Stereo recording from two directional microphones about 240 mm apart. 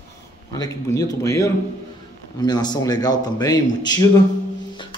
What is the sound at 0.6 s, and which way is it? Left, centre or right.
A man's voice, centre.